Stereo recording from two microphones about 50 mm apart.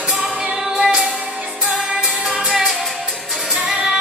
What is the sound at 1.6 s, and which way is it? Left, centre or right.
Music, right.